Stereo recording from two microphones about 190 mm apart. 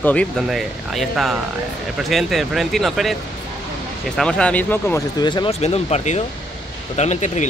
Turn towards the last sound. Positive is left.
turn(degrees=40)  # may be behind; listen again after turning